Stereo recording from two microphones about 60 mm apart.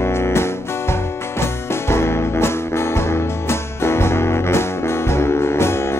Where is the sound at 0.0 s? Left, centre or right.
Left.